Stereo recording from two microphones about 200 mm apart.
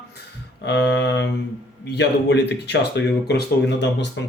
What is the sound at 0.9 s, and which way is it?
Speech, 60° left (ahead or behind).